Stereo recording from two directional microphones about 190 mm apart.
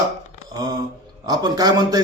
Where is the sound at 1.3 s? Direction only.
20° right (ahead or behind).